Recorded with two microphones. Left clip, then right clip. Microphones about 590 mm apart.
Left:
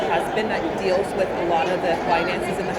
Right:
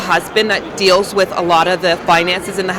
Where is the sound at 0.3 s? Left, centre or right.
Right.